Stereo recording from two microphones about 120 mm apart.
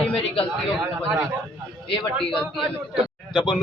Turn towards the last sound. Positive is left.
turn(degrees=40)  # may be behind; listen again after turning